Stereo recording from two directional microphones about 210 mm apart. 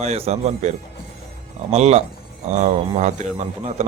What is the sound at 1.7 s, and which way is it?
Speech, 30° right (ahead or behind).